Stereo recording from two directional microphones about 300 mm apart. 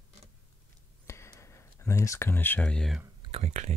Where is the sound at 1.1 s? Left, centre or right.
Centre.